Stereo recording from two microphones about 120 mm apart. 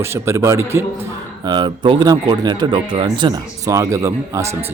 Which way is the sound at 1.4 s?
40° right (ahead or behind).